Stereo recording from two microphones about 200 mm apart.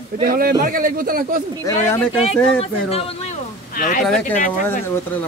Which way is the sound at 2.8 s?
30° left (ahead or behind).